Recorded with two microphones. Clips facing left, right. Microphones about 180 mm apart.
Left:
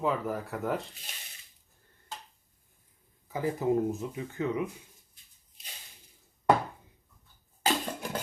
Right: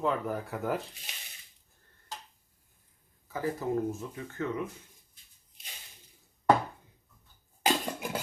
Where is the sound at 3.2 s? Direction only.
15° left (ahead or behind).